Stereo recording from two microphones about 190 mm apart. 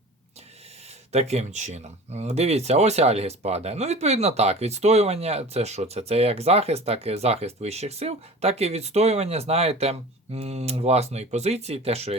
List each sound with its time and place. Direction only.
1.1 s speech: 35° right (ahead or behind)